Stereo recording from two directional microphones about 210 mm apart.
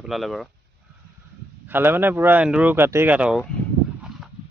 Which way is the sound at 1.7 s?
10° right (ahead or behind).